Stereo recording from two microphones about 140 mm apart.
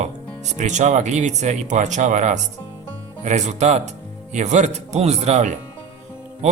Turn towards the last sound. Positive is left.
turn(degrees=-55)  # may be behind; listen again after turning